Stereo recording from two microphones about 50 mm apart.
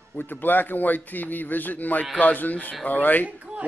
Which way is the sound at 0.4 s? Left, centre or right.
Left.